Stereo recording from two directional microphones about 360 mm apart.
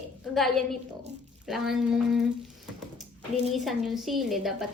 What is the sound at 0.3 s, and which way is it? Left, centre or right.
Speech, centre.